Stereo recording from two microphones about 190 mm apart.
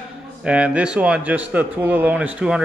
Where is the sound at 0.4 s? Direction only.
5° right (ahead or behind).